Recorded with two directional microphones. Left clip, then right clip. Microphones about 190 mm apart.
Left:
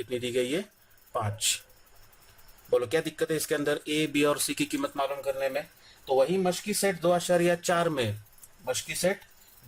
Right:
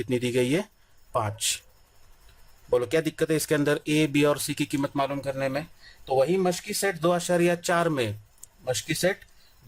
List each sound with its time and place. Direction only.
0.0 s speech: 25° right (ahead or behind)
2.6 s speech: 30° right (ahead or behind)